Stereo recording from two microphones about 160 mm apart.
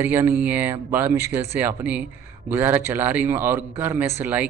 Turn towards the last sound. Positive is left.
turn(degrees=-10)  # may be behind; listen again after turning